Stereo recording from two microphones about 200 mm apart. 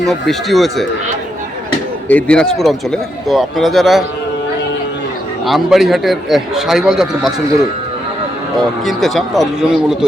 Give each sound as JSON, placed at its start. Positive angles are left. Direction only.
{"t": 0.0, "sound": "speech", "side_deg": 0}
{"t": 2.0, "sound": "speech", "side_deg": 5}
{"t": 5.5, "sound": "speech", "side_deg": 0}
{"t": 8.8, "sound": "speech", "side_deg": 0}